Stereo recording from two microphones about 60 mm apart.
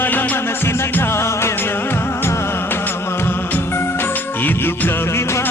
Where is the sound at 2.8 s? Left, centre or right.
Left.